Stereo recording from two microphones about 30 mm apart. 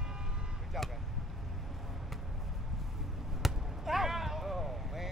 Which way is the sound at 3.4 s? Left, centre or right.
Centre.